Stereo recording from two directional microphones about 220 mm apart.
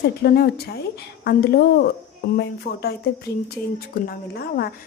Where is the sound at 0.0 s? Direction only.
45° left (ahead or behind).